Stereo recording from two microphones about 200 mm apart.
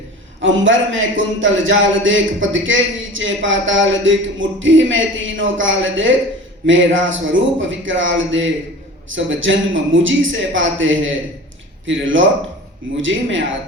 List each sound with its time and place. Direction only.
0.4 s speech: 70° right (ahead or behind)